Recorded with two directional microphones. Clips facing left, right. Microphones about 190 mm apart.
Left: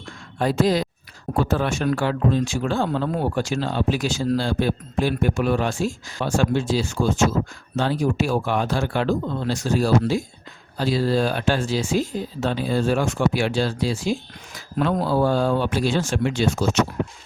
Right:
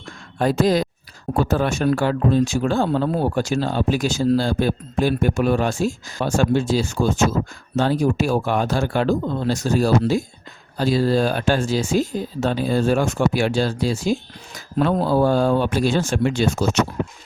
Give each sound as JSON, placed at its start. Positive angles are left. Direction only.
{"t": 0.3, "sound": "speech", "side_deg": -45}